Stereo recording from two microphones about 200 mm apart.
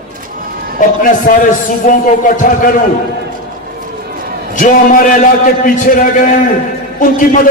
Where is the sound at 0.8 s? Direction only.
45° left (ahead or behind).